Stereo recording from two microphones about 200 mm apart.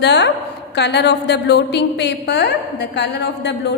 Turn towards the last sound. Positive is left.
turn(degrees=60)  # may be behind; listen again after turning